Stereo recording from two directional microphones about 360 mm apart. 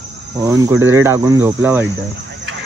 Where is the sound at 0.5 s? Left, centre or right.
Centre.